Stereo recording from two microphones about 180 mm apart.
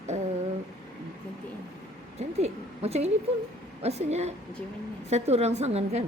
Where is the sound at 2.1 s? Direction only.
35° right (ahead or behind).